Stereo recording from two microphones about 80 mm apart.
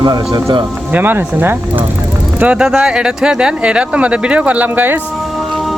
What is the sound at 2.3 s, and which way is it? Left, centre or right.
Speech, centre.